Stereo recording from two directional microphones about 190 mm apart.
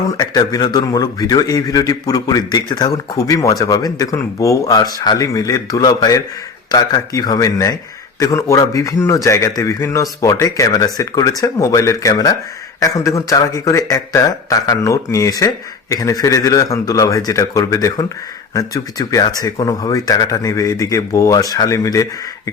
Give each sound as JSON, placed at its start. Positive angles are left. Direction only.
{"t": 0.2, "sound": "a man's voice", "side_deg": 20}